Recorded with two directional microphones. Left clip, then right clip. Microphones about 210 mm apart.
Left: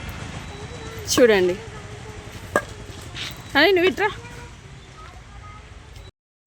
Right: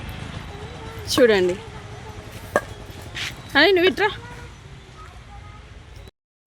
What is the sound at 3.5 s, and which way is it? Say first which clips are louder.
Speech: right 1 dB; centre (ahead or behind).